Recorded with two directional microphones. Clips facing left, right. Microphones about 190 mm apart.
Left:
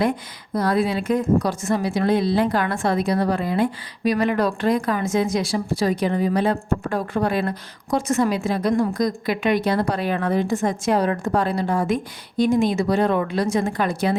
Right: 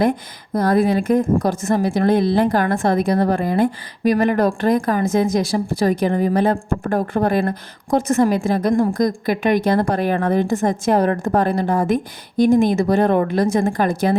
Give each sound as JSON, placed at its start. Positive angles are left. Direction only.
{"t": 0.5, "sound": "a woman's voice", "side_deg": -45}